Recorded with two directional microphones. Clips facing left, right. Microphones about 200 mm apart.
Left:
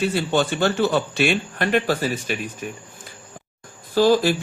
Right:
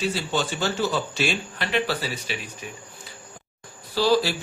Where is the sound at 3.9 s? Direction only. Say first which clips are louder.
Left 4 dB; 50° left (ahead or behind).